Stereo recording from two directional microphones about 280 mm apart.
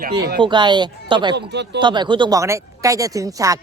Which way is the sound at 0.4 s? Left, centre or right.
Centre.